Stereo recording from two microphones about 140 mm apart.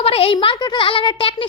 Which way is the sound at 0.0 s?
45° left (ahead or behind).